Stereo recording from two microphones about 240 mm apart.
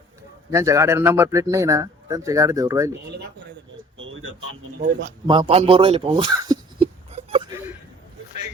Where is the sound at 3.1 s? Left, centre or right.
Right.